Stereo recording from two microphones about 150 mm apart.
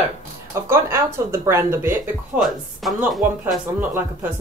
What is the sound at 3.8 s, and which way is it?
Speech, 15° right (ahead or behind).